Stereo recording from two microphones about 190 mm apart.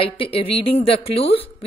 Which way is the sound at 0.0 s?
30° left (ahead or behind).